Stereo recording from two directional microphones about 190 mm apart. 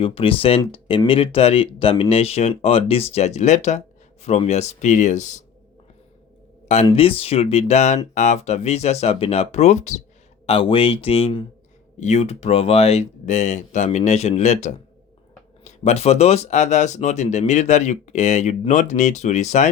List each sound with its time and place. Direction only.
0.0 s speech: 30° left (ahead or behind)
6.9 s speech: 30° left (ahead or behind)